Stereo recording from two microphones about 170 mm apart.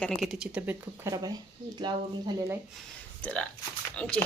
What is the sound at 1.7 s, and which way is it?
Speech, 25° right (ahead or behind).